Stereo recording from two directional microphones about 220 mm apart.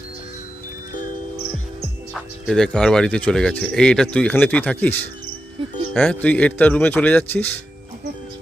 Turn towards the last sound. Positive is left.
turn(degrees=10)  # may be behind; listen again after turning